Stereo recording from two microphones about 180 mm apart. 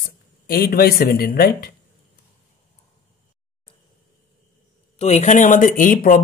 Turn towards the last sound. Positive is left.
turn(degrees=50)  # may be behind; listen again after turning